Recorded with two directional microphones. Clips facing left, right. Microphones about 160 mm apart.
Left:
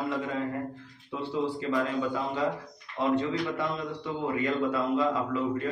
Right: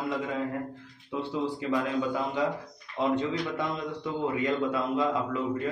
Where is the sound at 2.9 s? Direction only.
15° right (ahead or behind).